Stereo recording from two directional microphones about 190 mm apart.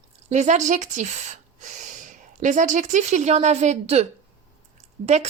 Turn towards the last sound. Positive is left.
turn(degrees=-35)  # may be behind; listen again after turning